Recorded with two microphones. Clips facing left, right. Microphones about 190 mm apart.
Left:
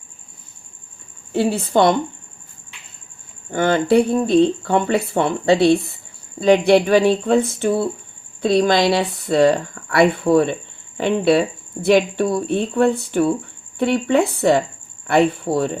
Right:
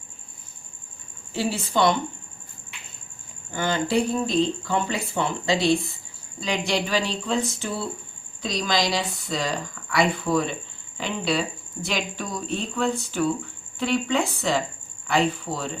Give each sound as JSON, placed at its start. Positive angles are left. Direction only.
{"t": 1.3, "sound": "speech", "side_deg": 55}
{"t": 3.5, "sound": "speech", "side_deg": 55}